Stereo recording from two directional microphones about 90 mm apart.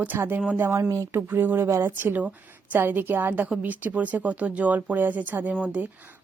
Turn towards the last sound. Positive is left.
turn(degrees=-15)  # may be behind; listen again after turning